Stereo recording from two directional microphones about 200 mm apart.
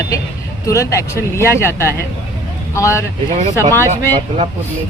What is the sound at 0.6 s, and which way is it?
Speech, 15° left (ahead or behind).